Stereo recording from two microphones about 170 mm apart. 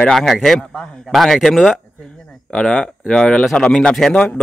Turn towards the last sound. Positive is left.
turn(degrees=5)  # may be behind; listen again after turning